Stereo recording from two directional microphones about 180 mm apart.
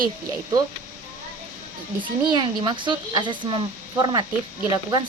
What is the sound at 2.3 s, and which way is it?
Speech, 25° right (ahead or behind).